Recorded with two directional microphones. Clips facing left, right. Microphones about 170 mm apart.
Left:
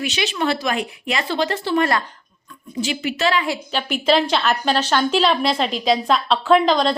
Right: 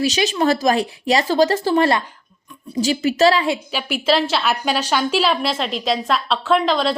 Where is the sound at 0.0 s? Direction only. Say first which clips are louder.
Right 4 dB; 40° right (ahead or behind).